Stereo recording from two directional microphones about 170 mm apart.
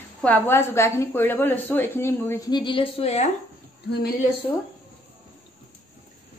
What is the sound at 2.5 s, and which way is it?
Speech, 25° left (ahead or behind).